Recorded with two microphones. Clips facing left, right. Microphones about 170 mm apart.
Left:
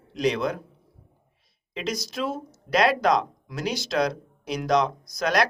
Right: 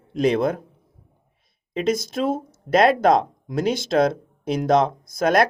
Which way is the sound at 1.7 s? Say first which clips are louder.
Right 8 dB; 50° right (ahead or behind).